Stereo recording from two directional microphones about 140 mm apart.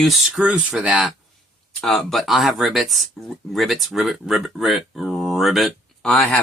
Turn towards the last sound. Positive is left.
turn(degrees=5)  # may be behind; listen again after turning